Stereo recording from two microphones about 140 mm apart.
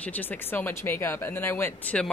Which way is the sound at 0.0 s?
10° left (ahead or behind).